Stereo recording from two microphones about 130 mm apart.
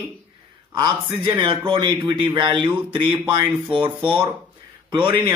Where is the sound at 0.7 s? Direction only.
35° right (ahead or behind).